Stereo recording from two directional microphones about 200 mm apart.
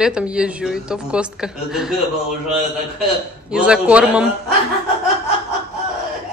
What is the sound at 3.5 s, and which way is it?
Speech, 5° right (ahead or behind).